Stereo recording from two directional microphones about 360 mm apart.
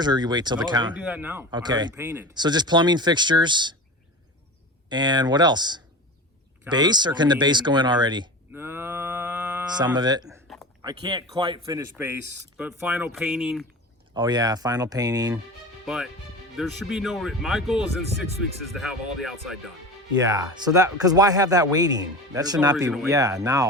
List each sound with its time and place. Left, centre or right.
0.0 s speech: centre
4.9 s speech: centre
10.2 s a sound: centre
10.8 s speech: centre
14.2 s speech: centre
16.6 s speech: centre